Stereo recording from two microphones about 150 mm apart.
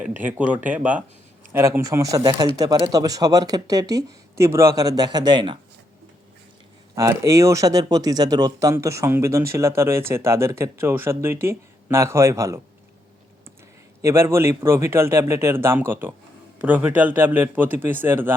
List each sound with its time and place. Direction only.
0.2 s speech: 10° right (ahead or behind); by 5.5 s 30° right (ahead or behind)
6.9 s speech: 20° right (ahead or behind)
14.0 s speech: 20° right (ahead or behind)